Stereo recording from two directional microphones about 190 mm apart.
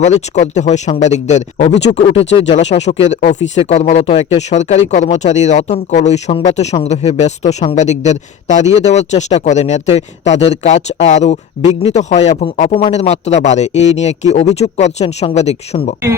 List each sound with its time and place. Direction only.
0.0 s speech: 35° left (ahead or behind)
7.4 s speech: 25° left (ahead or behind)
7.8 s speech: 35° left (ahead or behind)